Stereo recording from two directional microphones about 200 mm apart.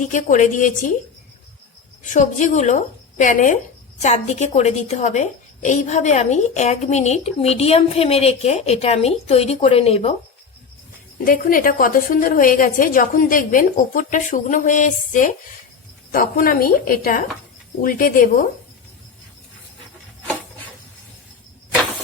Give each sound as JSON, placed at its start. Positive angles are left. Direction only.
{"t": 0.0, "sound": "a woman's voice", "side_deg": 40}
{"t": 2.1, "sound": "a woman's voice", "side_deg": 35}
{"t": 11.2, "sound": "a woman's voice", "side_deg": 45}